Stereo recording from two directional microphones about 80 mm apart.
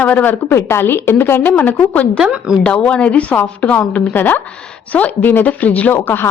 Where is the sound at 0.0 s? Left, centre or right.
Centre.